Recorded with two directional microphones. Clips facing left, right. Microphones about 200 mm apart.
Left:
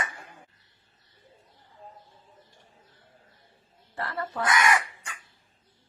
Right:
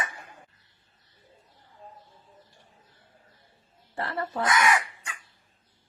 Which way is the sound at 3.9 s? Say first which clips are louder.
Right 2 dB; 30° right (ahead or behind).